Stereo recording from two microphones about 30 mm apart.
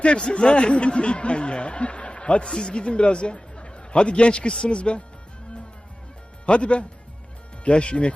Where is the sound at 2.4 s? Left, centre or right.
Left.